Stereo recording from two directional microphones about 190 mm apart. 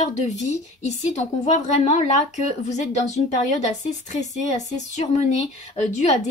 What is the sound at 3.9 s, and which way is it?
Speech, 40° left (ahead or behind).